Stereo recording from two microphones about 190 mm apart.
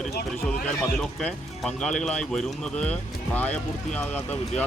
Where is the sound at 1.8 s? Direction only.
5° left (ahead or behind).